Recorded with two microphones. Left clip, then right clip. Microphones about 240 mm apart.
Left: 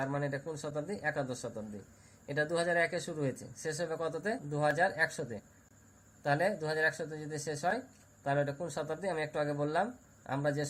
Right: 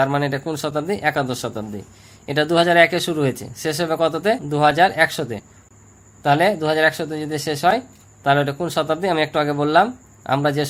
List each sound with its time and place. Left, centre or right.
0.0 s speech: right